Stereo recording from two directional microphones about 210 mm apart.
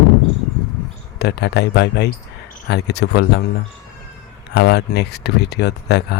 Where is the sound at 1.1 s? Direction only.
50° left (ahead or behind).